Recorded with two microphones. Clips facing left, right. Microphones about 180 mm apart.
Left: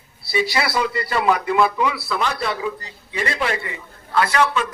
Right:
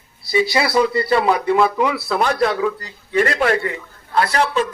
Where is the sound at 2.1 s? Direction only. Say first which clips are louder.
Right 6 dB; 55° right (ahead or behind).